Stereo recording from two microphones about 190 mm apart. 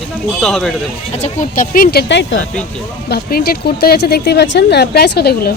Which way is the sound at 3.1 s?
55° left (ahead or behind).